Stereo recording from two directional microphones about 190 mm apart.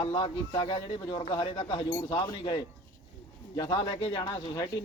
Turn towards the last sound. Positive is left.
turn(degrees=20)  # may be behind; listen again after turning